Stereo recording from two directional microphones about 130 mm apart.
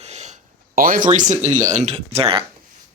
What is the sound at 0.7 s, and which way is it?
Speech, 90° right.